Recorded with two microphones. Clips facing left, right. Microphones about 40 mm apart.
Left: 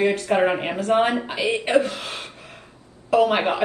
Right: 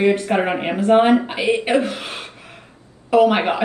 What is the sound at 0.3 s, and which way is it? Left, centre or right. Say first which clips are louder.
Speech: even; right.